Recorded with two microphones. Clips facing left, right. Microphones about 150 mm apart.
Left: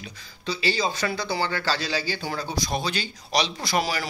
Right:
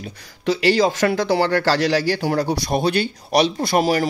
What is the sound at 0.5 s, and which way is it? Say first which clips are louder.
Speech: right 9 dB; 85° right.